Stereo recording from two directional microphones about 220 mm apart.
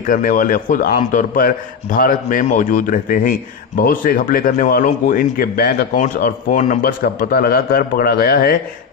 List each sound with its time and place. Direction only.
0.0 s a man's voice: 40° left (ahead or behind)